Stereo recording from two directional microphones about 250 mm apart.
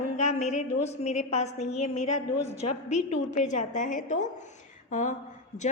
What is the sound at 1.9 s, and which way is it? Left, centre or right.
Speech, left.